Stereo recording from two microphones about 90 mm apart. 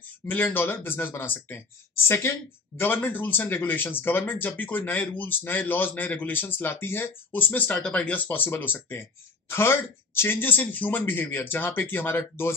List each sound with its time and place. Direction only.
0.3 s speech: 20° left (ahead or behind)